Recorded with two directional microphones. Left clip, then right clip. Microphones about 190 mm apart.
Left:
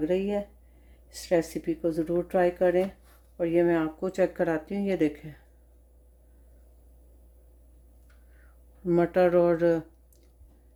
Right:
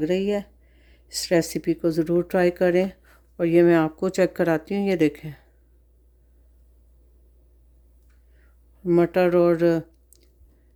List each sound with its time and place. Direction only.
0.0 s speech: 55° right (ahead or behind)
8.8 s speech: 35° right (ahead or behind)